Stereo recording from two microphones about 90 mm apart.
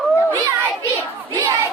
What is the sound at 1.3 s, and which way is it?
Battle cry, 35° right (ahead or behind).